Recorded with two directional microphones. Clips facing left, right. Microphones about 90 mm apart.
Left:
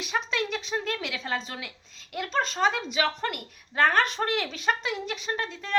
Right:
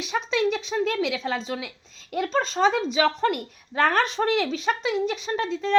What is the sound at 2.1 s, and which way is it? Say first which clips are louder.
Speech: right 4 dB; 35° right (ahead or behind).